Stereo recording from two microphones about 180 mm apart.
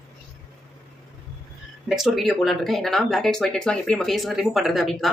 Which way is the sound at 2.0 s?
Centre (ahead or behind).